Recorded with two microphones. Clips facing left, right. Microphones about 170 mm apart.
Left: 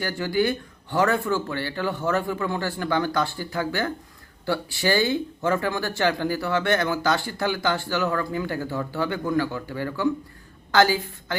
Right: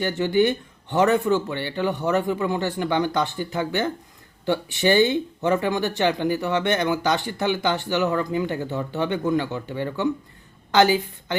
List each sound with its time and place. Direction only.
0.0 s a woman's voice: 20° right (ahead or behind)